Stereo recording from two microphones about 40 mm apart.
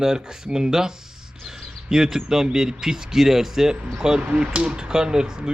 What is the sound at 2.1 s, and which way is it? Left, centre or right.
Speech, centre.